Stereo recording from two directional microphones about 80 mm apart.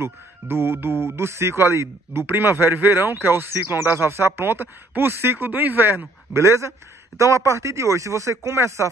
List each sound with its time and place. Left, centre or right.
0.0 s speech: right